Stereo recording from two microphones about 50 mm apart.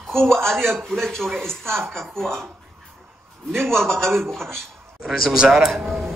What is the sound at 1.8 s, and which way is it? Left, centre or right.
Speech, right.